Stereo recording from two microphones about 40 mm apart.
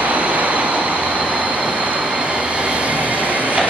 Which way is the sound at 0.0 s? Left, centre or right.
Right.